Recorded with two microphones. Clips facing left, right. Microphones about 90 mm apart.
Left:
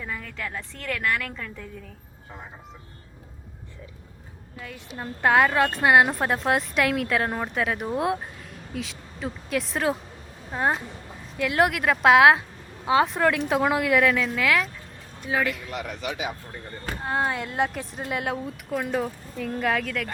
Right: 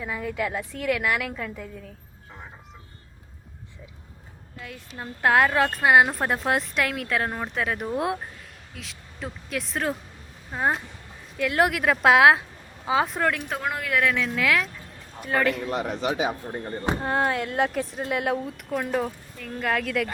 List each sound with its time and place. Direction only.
0.0 s a woman's voice: 10° right (ahead or behind)
4.9 s a woman's voice: centre (ahead or behind)
15.7 s speech: 35° right (ahead or behind)
17.0 s a woman's voice: centre (ahead or behind)